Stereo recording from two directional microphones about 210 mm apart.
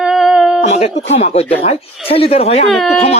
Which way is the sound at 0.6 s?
30° left (ahead or behind).